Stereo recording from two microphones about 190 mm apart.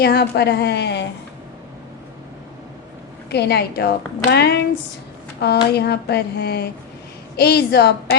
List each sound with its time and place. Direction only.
0.0 s a woman's voice: 60° left (ahead or behind)
3.2 s a woman's voice: 60° left (ahead or behind)